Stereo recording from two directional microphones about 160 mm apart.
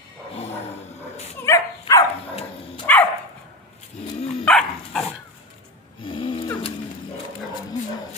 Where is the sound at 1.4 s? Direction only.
20° left (ahead or behind).